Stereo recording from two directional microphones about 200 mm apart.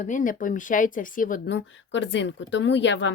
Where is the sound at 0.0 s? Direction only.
40° left (ahead or behind).